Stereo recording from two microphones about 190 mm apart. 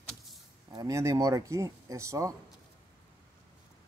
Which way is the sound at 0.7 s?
15° right (ahead or behind).